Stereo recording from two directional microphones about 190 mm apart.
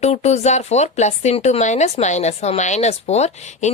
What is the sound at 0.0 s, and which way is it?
Speech, 35° left (ahead or behind).